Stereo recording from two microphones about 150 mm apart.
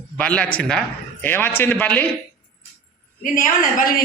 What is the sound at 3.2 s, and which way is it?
Speech, 60° left (ahead or behind).